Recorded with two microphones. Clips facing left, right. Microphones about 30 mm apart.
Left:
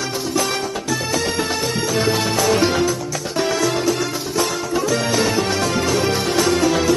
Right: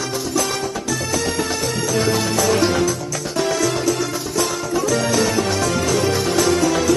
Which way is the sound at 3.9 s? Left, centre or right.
Left.